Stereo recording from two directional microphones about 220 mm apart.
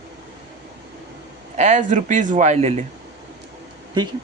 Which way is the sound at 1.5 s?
35° right (ahead or behind).